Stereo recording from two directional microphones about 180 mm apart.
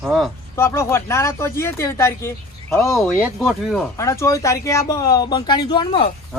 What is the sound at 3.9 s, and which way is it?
Speech, 15° left (ahead or behind).